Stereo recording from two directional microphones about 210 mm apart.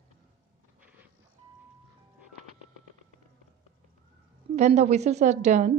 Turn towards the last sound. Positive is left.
turn(degrees=-35)  # may be behind; listen again after turning